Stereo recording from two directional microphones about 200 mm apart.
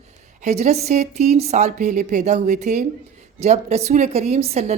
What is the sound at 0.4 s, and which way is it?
A woman's voice, 35° right (ahead or behind).